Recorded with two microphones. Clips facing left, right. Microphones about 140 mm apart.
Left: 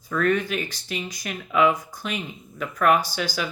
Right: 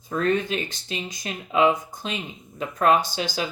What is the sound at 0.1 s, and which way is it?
Speech, 25° right (ahead or behind).